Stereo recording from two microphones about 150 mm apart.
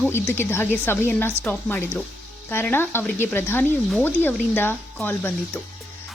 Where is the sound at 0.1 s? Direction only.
15° left (ahead or behind).